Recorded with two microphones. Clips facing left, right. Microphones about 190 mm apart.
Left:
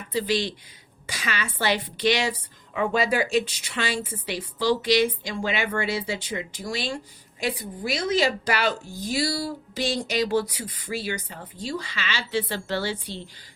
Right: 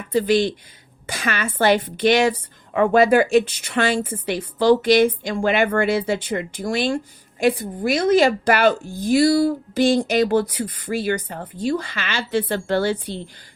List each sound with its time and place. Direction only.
0.1 s speech: 50° right (ahead or behind)